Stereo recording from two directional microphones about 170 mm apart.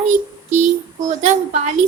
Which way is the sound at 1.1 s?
45° right (ahead or behind).